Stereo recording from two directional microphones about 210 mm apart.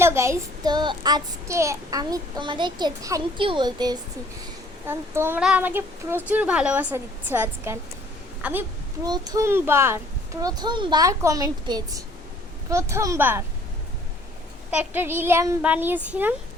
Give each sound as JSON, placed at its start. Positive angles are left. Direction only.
{"t": 0.0, "sound": "child singing", "side_deg": -15}
{"t": 4.9, "sound": "a woman's voice", "side_deg": -10}
{"t": 9.0, "sound": "speech", "side_deg": -20}
{"t": 14.7, "sound": "speech", "side_deg": -10}